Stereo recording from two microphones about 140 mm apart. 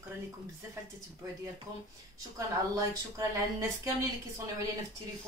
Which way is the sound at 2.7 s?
20° right (ahead or behind).